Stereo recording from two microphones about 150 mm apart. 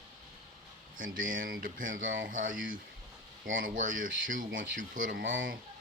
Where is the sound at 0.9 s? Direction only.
65° right (ahead or behind).